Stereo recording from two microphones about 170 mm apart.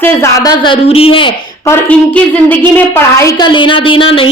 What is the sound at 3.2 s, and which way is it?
A woman's voice, 20° left (ahead or behind).